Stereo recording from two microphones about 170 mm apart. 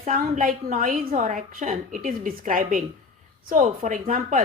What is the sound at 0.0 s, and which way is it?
A woman's voice, 50° right (ahead or behind).